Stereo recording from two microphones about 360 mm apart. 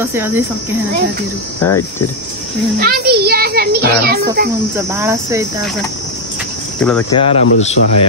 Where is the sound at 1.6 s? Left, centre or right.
Centre.